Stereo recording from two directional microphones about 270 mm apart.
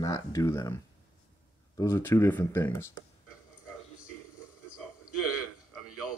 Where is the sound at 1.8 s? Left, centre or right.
Centre.